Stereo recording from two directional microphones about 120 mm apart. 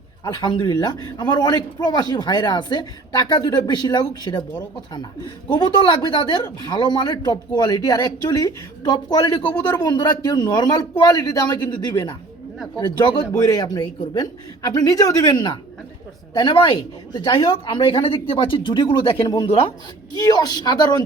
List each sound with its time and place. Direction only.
0.3 s speech: 40° left (ahead or behind)
5.5 s a woman's voice: 40° left (ahead or behind)
20.2 s speech: 35° left (ahead or behind)